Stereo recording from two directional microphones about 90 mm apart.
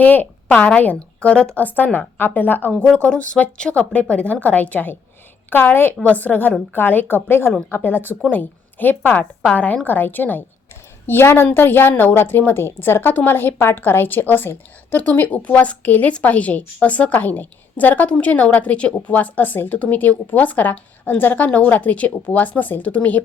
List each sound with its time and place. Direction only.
0.0 s a woman's voice: 20° left (ahead or behind)